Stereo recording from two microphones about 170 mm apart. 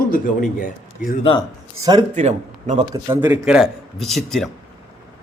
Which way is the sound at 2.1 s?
45° right (ahead or behind).